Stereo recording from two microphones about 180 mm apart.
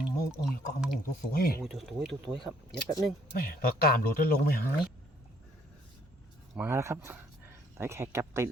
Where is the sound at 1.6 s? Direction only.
Centre (ahead or behind).